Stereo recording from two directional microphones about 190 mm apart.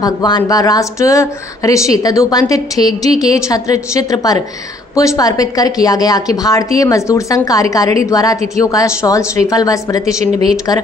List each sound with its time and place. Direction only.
0.0 s a woman's voice: 20° left (ahead or behind)